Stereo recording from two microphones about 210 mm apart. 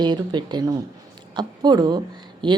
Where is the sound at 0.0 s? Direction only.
20° right (ahead or behind).